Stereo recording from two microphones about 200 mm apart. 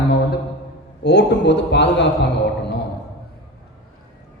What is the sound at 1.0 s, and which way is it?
A man's voice, 60° left (ahead or behind).